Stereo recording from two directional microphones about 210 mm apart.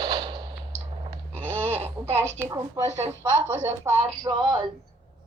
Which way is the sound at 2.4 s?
10° right (ahead or behind).